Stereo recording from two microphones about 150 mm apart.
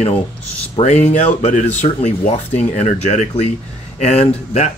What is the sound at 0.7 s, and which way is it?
Speech, 50° left (ahead or behind).